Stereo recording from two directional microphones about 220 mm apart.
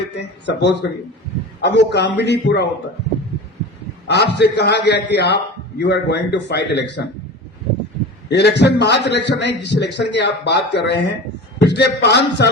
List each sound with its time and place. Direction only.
0.4 s a man's voice: 50° left (ahead or behind)
4.0 s a man's voice: 50° left (ahead or behind)
8.3 s a man's voice: 50° left (ahead or behind)